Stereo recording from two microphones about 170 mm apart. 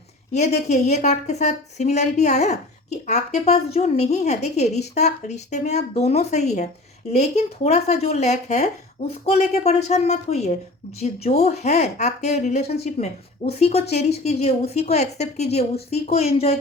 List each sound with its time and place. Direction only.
0.3 s a woman's voice: 40° left (ahead or behind)